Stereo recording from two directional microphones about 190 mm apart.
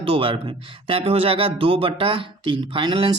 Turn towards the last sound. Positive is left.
turn(degrees=-25)  # may be behind; listen again after turning